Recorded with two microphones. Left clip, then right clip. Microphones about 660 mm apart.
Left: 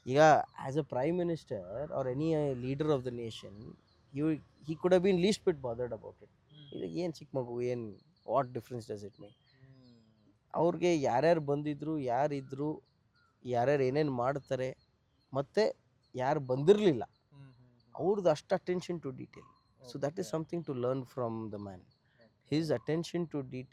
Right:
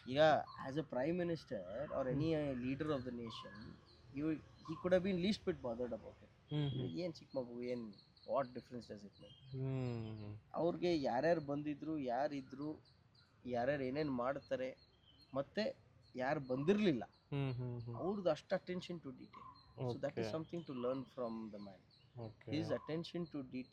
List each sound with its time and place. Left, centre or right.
0.0 s speech: left
6.9 s speech: left
10.5 s speech: left
22.4 s speech: left